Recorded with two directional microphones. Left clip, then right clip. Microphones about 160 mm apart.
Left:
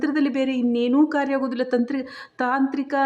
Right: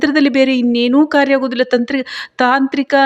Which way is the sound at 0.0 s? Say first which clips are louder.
Right 10 dB; 25° right (ahead or behind).